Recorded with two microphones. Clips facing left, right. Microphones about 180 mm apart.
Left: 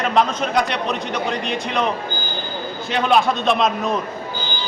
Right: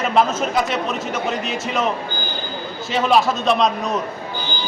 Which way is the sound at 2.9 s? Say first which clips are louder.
Even; centre (ahead or behind).